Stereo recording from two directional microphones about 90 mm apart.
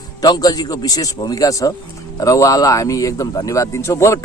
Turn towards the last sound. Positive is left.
turn(degrees=30)  # may be behind; listen again after turning